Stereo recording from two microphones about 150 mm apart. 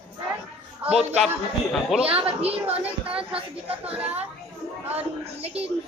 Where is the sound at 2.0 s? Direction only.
40° right (ahead or behind).